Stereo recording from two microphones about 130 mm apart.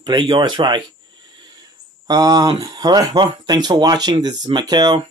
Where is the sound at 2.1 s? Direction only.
30° right (ahead or behind).